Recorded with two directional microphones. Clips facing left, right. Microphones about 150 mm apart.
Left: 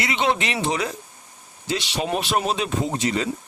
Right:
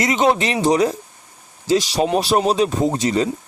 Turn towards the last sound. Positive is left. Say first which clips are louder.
# right 5 dB
turn(degrees=-35)  # may be behind; listen again after turning